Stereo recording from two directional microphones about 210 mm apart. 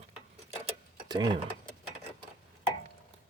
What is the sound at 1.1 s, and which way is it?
Speech, 20° right (ahead or behind).